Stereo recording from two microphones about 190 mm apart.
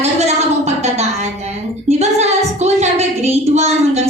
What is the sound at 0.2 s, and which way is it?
Music, 35° right (ahead or behind).